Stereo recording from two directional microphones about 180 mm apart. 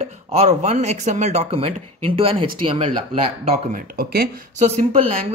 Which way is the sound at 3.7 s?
55° right (ahead or behind).